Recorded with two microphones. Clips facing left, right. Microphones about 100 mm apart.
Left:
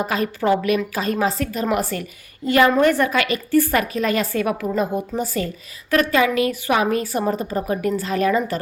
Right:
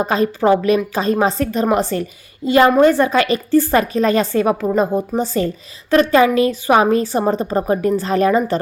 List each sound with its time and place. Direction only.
0.0 s a woman's voice: 30° right (ahead or behind)